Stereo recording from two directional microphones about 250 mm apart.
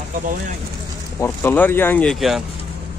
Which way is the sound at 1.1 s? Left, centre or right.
Centre.